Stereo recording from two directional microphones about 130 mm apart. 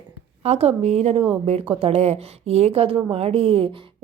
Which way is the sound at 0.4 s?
55° right (ahead or behind).